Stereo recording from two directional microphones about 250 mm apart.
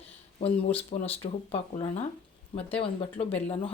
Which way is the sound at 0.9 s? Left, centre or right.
Left.